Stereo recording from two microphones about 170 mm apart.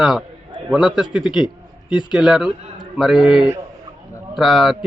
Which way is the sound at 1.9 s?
30° left (ahead or behind).